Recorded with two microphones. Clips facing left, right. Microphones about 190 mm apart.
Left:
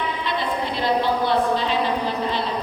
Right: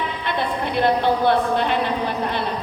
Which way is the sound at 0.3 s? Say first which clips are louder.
Right 3 dB; 55° right (ahead or behind).